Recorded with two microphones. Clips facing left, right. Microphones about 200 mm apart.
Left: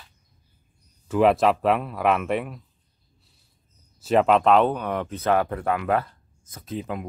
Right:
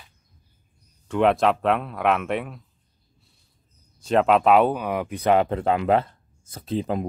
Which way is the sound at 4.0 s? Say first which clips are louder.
Even; centre (ahead or behind).